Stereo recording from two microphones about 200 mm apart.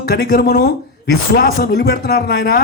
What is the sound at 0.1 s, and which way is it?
Speech, 55° left (ahead or behind).